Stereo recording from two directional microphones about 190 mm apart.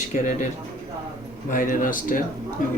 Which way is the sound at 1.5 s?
45° left (ahead or behind).